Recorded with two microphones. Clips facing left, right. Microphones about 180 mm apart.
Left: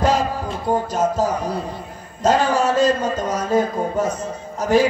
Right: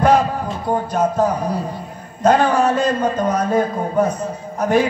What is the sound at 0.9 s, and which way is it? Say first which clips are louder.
Speech: right 2 dB; 60° right (ahead or behind).